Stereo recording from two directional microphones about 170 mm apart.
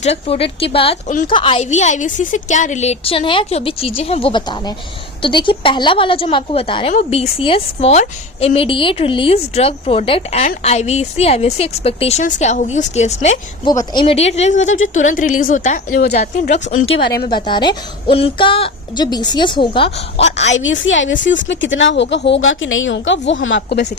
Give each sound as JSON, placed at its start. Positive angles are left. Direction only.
{"t": 0.0, "sound": "a woman's voice", "side_deg": 35}
{"t": 1.0, "sound": "a woman's voice", "side_deg": 45}
{"t": 1.3, "sound": "a woman's voice", "side_deg": 30}
{"t": 1.7, "sound": "a woman's voice", "side_deg": 45}
{"t": 13.7, "sound": "a woman's voice", "side_deg": 25}
{"t": 17.1, "sound": "a woman's voice", "side_deg": 65}
{"t": 17.3, "sound": "a woman's voice", "side_deg": 25}
{"t": 20.4, "sound": "a woman's voice", "side_deg": 90}